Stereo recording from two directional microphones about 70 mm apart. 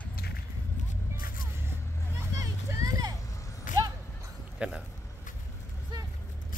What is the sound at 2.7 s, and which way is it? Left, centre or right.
Vehicle, right.